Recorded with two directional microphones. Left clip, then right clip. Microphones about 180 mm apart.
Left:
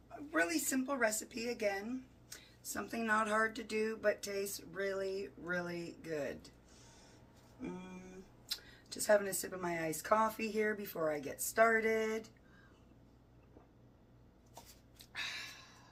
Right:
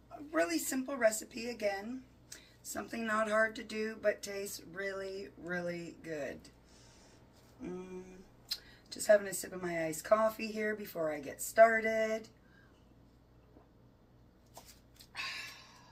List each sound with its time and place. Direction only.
0.3 s speech: 15° left (ahead or behind)
8.4 s speech: 15° left (ahead or behind)